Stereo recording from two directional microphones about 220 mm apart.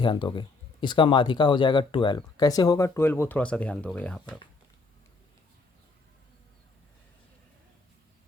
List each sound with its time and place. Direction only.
0.0 s speech: 20° left (ahead or behind); by 4.4 s 5° left (ahead or behind)